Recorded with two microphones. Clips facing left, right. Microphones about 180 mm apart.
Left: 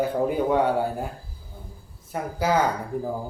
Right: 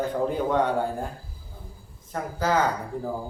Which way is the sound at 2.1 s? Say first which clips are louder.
Left 1 dB; 10° left (ahead or behind).